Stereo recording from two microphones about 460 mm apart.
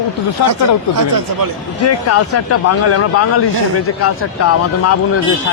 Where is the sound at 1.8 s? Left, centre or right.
Left.